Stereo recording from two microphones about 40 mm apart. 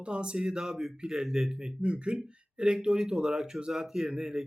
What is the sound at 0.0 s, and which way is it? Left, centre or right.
Speech, right.